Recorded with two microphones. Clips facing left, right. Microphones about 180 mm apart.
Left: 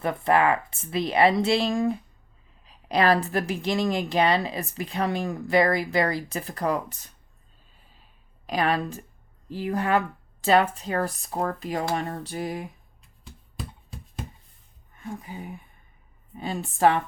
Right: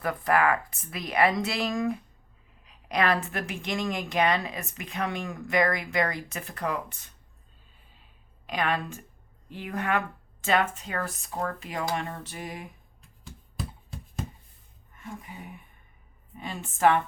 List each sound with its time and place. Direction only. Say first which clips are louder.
0.0 s a woman's voice: left 3 dB; 25° left (ahead or behind)
8.4 s a woman's voice: left 4 dB; 35° left (ahead or behind)
13.6 s hands: right 1 dB; centre (ahead or behind)
15.0 s speech: left 5 dB; 35° left (ahead or behind)
16.4 s a woman's voice: left 2 dB; 35° left (ahead or behind)